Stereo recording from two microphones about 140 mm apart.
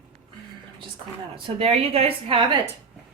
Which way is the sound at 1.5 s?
45° right (ahead or behind).